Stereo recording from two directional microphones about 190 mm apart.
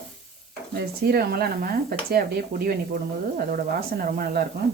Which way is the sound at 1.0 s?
55° right (ahead or behind).